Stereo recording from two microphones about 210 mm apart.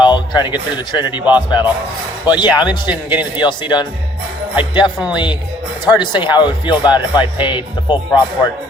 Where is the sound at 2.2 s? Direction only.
20° left (ahead or behind).